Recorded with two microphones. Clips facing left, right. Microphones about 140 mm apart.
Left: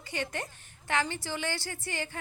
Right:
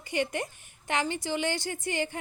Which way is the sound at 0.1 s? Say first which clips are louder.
Right 5 dB; 15° right (ahead or behind).